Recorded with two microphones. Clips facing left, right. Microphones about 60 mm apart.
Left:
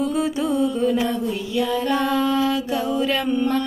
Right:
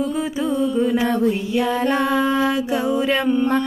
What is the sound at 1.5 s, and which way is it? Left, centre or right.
Music, right.